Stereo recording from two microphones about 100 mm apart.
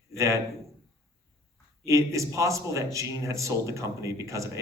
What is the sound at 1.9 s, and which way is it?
Speech, 30° right (ahead or behind).